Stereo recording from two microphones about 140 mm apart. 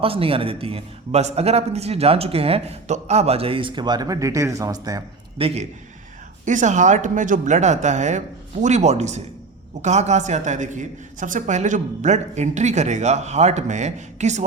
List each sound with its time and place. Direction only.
0.0 s a man's voice: 40° right (ahead or behind); by 5.0 s 25° right (ahead or behind)
5.4 s a man's voice: 45° right (ahead or behind)
6.4 s speech: 60° right (ahead or behind)